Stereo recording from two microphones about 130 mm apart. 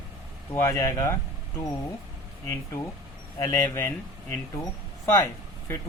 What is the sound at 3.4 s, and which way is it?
Speech, 20° left (ahead or behind).